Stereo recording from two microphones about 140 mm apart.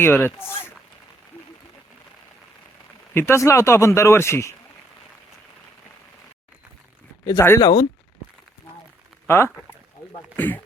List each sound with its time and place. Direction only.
0.0 s speech: 15° left (ahead or behind)
3.2 s speech: 20° left (ahead or behind)
7.3 s speech: 20° left (ahead or behind)
9.2 s speech: 20° left (ahead or behind)